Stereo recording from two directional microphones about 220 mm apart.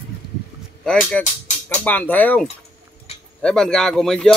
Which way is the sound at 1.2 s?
5° left (ahead or behind).